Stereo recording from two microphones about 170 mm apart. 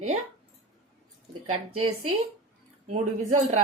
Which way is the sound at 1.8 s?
35° right (ahead or behind).